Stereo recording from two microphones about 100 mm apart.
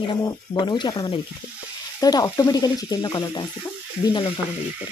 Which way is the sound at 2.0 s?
40° left (ahead or behind).